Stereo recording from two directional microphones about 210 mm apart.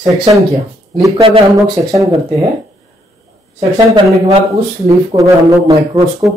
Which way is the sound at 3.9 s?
20° right (ahead or behind).